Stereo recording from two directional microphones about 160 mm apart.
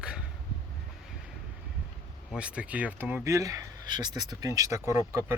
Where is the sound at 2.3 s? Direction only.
5° right (ahead or behind).